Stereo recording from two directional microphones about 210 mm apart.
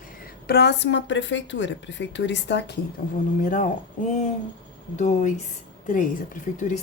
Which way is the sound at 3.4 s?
40° left (ahead or behind).